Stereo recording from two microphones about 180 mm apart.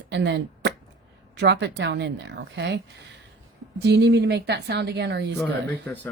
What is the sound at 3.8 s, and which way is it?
Speech, 70° right (ahead or behind).